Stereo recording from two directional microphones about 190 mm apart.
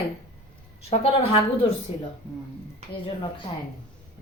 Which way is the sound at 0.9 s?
35° left (ahead or behind).